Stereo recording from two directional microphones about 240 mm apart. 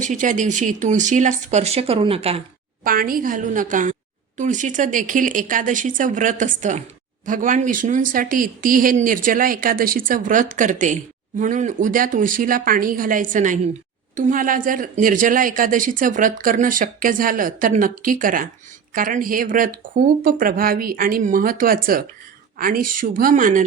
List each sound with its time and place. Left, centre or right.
0.0 s speech: right
2.8 s speech: right